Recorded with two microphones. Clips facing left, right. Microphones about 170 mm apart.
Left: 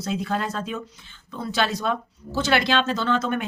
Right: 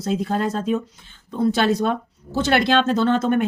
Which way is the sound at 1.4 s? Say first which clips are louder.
Right 7 dB; 55° right (ahead or behind).